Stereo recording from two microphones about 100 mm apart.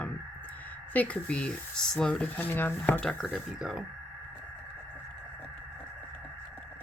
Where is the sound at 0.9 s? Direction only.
15° left (ahead or behind).